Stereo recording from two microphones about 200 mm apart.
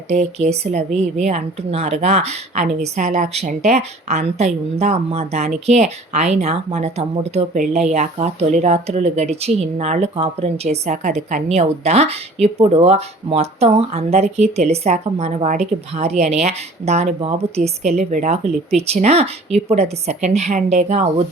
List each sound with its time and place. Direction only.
0.1 s speech: 35° right (ahead or behind)